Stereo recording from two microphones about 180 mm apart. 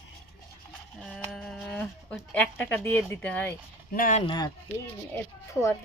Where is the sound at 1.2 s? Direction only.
Centre (ahead or behind).